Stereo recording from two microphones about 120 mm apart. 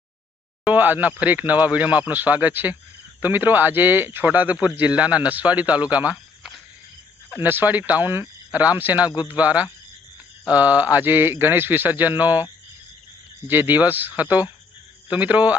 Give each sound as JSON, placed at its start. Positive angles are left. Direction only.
{"t": 0.6, "sound": "speech", "side_deg": -15}
{"t": 13.5, "sound": "speech", "side_deg": -15}